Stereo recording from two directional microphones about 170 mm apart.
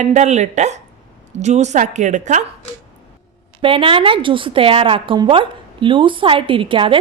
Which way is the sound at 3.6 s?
30° right (ahead or behind).